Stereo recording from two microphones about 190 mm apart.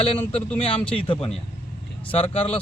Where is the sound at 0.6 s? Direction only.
30° left (ahead or behind).